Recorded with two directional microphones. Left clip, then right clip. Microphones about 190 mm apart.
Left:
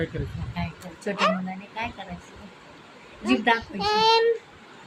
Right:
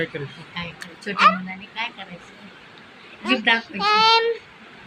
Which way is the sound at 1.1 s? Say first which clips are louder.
Right 4 dB; 50° left (ahead or behind).